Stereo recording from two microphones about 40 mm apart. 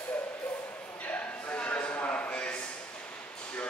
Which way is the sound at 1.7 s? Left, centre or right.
Left.